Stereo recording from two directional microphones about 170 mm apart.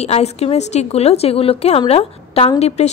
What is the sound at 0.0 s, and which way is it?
Speech, 40° left (ahead or behind).